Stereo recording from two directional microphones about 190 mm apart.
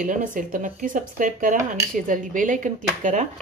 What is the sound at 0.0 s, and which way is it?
A woman's voice, 45° right (ahead or behind).